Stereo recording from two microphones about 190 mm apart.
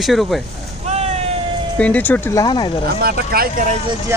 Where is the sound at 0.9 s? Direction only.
35° right (ahead or behind).